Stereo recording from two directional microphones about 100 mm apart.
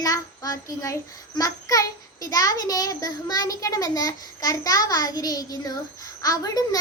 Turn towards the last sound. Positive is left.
turn(degrees=40)  # may be behind; listen again after turning